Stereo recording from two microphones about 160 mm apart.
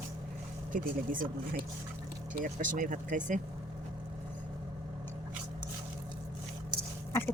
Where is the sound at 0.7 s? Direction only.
60° right (ahead or behind).